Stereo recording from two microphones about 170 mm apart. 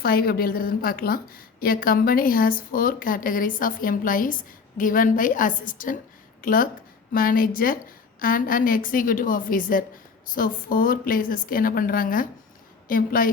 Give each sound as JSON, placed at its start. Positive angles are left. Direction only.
{"t": 0.0, "sound": "a woman's voice", "side_deg": 60}